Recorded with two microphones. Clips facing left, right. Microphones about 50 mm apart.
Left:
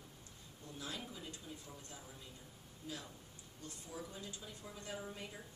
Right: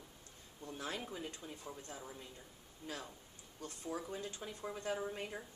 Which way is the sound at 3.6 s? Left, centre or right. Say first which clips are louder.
Right 6 dB; right.